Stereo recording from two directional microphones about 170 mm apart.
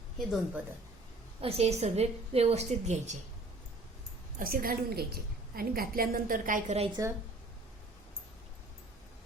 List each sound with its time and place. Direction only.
0.2 s a woman's voice: centre (ahead or behind)
1.4 s a woman's voice: 35° right (ahead or behind)
4.4 s a woman's voice: 55° right (ahead or behind)